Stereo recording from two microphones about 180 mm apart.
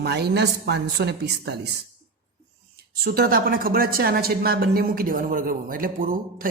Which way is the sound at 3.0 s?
55° right (ahead or behind).